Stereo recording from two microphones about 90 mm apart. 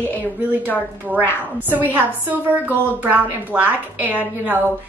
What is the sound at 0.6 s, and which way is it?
Speech, 20° left (ahead or behind).